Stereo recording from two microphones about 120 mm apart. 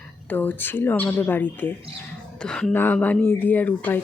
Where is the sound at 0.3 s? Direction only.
15° left (ahead or behind).